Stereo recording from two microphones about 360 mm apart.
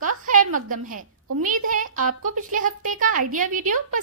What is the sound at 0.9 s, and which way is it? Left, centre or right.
Speech, right.